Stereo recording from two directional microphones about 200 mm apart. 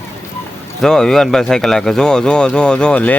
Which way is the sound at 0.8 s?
5° left (ahead or behind).